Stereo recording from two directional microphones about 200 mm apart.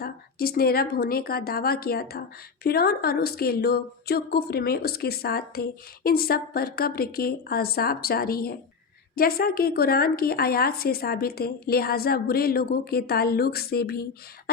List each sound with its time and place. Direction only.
0.0 s a woman's voice: 50° left (ahead or behind)